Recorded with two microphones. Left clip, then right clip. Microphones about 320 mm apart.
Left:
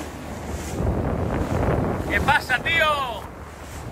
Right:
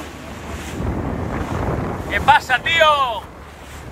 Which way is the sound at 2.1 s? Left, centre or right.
Centre.